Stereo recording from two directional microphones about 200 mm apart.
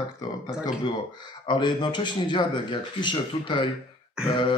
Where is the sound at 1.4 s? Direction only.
25° left (ahead or behind).